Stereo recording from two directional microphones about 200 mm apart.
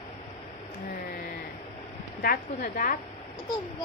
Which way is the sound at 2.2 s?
45° left (ahead or behind).